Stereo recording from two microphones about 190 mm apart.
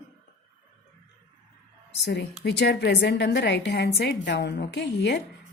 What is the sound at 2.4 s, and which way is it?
A woman's voice, 65° left (ahead or behind).